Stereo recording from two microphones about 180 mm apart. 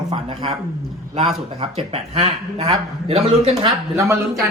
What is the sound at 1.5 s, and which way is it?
Speech, 35° right (ahead or behind).